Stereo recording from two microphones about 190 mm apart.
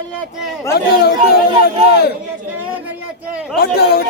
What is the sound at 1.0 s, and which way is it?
A man's voice, 55° left (ahead or behind).